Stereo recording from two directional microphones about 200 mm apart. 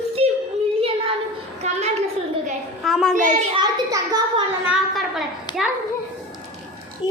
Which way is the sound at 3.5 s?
20° right (ahead or behind).